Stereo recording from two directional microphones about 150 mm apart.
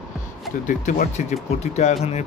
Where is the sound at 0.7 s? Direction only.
60° left (ahead or behind).